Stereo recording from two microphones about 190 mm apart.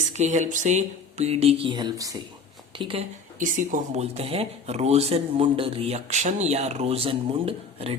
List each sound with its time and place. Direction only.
0.2 s speech: 40° right (ahead or behind)
3.4 s speech: 45° right (ahead or behind)